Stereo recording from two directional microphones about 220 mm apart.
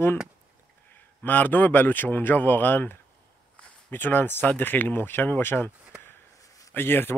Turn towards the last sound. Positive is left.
turn(degrees=10)  # may be behind; listen again after turning